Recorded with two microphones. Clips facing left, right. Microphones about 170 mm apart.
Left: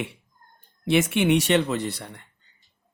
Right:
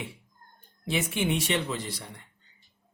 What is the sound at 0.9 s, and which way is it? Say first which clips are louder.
Speech: left 8 dB; 80° left.